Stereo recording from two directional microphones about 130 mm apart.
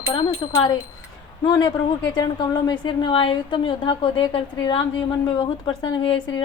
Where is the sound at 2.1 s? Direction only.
35° left (ahead or behind).